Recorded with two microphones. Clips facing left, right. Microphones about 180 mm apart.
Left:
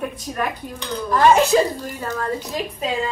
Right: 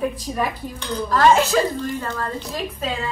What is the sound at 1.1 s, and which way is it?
A woman's voice, 15° left (ahead or behind).